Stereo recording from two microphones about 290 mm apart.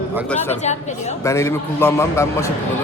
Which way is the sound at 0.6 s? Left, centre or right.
Left.